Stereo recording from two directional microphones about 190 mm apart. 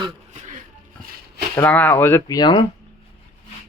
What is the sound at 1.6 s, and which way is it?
Speech, 10° left (ahead or behind).